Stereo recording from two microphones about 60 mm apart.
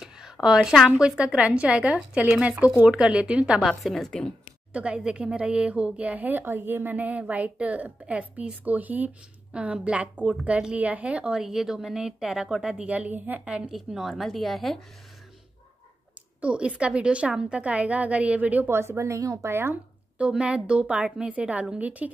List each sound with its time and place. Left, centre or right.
0.0 s a sound: centre
0.8 s a woman's voice: centre
3.6 s speech: centre
4.7 s a woman's voice: centre
13.5 s a woman's voice: centre
13.7 s speech: centre
16.3 s a woman's voice: right
18.7 s a woman's voice: right
19.5 s speech: right
20.2 s a woman's voice: centre